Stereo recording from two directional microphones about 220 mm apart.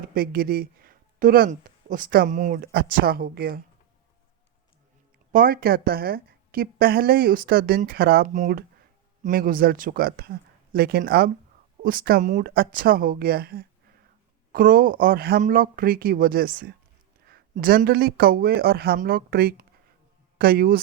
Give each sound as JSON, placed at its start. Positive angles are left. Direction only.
{"t": 0.1, "sound": "speech", "side_deg": -45}
{"t": 5.3, "sound": "speech", "side_deg": -40}